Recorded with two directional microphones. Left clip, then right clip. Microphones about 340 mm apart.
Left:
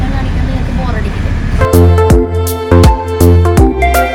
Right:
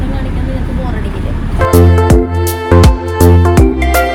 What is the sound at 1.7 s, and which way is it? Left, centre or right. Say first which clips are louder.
Music: left 1 dB; centre.